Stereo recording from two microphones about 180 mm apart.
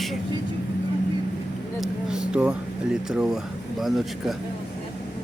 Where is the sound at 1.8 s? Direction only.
5° right (ahead or behind).